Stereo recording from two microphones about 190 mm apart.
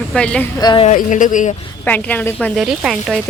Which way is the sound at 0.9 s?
40° left (ahead or behind).